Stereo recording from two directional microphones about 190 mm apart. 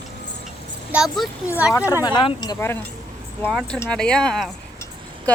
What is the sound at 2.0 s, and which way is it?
Speech, 20° left (ahead or behind).